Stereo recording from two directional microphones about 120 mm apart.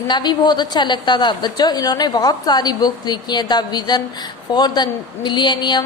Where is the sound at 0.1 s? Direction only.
40° left (ahead or behind).